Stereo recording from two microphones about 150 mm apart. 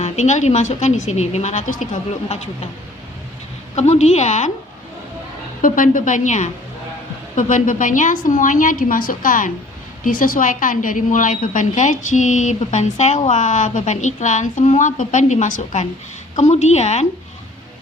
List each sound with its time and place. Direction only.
0.0 s a woman's voice: 50° left (ahead or behind)
3.8 s a woman's voice: 50° left (ahead or behind)
5.6 s a woman's voice: 65° left (ahead or behind); by 17.1 s 50° left (ahead or behind)